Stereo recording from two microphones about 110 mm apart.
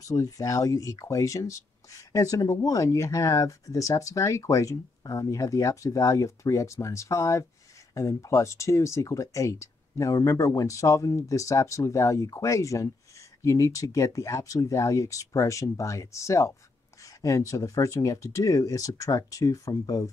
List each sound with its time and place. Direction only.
0.0 s speech: 30° left (ahead or behind)